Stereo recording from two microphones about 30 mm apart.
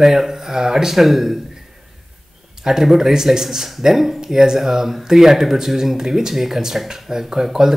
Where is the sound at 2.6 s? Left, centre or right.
Centre.